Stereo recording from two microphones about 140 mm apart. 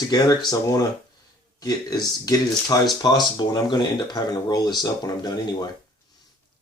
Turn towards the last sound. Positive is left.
turn(degrees=25)  # may be behind; listen again after turning